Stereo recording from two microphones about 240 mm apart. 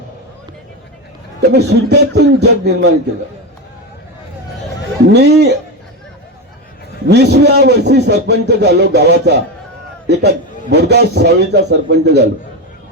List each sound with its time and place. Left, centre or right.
1.4 s a man's voice: right
5.1 s a man's voice: right
7.1 s a man's voice: right